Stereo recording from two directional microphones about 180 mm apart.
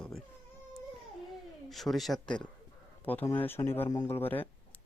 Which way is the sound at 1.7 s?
Centre (ahead or behind).